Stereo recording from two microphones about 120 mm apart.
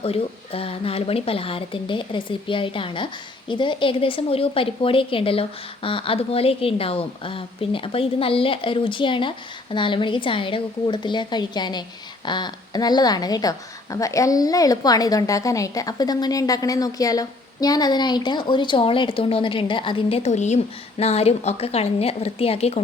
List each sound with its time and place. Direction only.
0.0 s a woman's voice: 55° left (ahead or behind); by 20.6 s 75° left (ahead or behind)
21.0 s a woman's voice: 60° left (ahead or behind)